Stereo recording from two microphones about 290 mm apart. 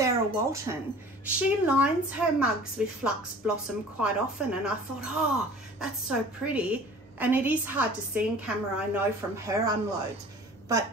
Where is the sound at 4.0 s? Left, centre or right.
Centre.